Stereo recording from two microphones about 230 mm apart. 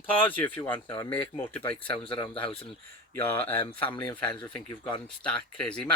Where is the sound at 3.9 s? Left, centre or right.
Centre.